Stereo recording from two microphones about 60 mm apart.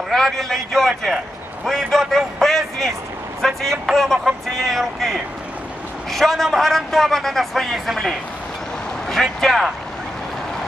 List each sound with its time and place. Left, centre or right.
0.1 s a man's voice: centre